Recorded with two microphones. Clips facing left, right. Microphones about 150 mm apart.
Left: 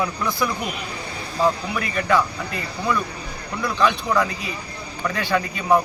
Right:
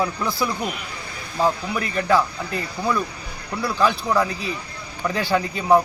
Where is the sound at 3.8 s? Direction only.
35° right (ahead or behind).